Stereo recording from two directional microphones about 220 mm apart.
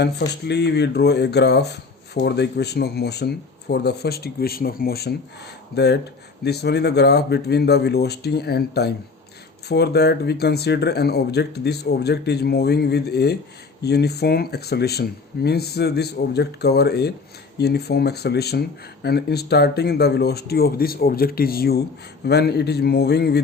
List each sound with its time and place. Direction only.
0.0 s speech: 50° left (ahead or behind)